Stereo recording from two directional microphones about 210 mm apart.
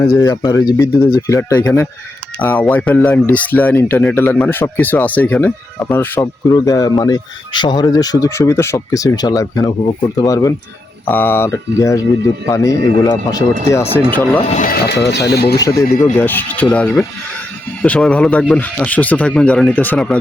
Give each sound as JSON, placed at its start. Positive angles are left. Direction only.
{"t": 0.0, "sound": "speech", "side_deg": 15}
{"t": 14.3, "sound": "speech", "side_deg": 35}
{"t": 14.8, "sound": "speech", "side_deg": 55}
{"t": 16.1, "sound": "speech", "side_deg": 10}